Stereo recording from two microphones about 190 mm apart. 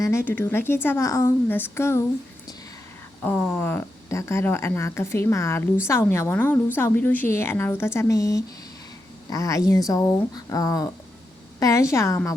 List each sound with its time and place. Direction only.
0.0 s speech: 15° left (ahead or behind)
3.2 s speech: 10° left (ahead or behind)